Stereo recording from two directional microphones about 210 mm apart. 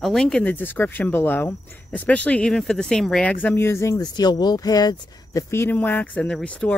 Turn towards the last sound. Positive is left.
turn(degrees=5)  # may be behind; listen again after turning